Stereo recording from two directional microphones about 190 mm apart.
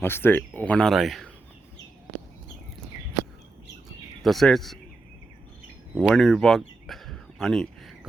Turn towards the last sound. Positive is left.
turn(degrees=0)  # may be behind; listen again after turning